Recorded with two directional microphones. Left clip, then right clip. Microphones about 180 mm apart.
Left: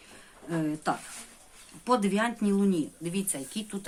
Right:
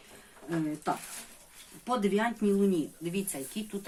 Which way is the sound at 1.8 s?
35° left (ahead or behind).